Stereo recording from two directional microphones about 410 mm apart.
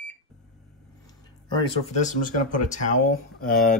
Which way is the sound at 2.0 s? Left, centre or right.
Centre.